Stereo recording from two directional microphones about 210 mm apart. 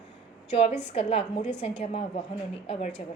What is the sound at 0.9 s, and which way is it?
A woman's voice, 25° left (ahead or behind).